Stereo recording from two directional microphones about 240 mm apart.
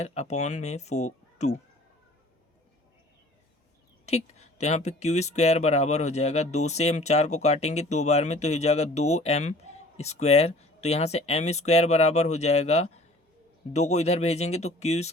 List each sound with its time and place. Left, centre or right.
0.0 s speech: left
4.0 s a sound: left
4.6 s speech: left